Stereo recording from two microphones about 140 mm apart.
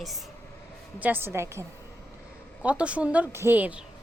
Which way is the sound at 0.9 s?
10° right (ahead or behind).